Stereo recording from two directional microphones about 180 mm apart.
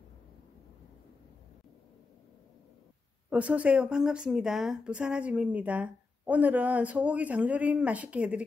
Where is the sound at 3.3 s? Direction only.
5° right (ahead or behind).